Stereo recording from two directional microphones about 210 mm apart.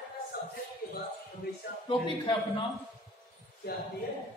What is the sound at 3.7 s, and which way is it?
Speech, 45° left (ahead or behind).